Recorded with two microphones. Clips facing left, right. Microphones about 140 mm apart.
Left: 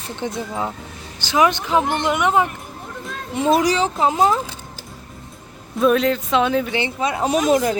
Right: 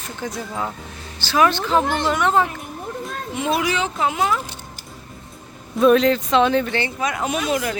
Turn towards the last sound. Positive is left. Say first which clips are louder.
# left 5 dB
turn(degrees=40)  # may be behind; listen again after turning